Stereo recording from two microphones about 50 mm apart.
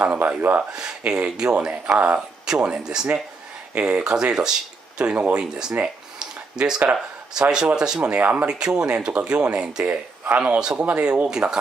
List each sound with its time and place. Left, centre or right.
0.0 s speech: right
0.7 s speech: centre
6.1 s a sound: centre
7.3 s speech: centre
8.2 s speech: right
8.5 s speech: centre
11.2 s speech: centre